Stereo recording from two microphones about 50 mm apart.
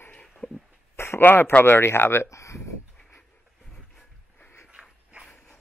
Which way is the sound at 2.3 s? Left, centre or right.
Left.